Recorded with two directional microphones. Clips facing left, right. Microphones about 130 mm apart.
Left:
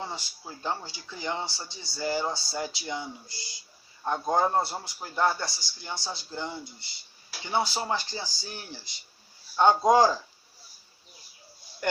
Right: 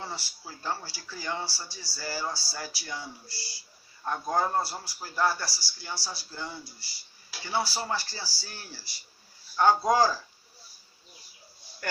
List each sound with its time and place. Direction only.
0.0 s a man's voice: 20° left (ahead or behind)
11.8 s speech: 20° left (ahead or behind)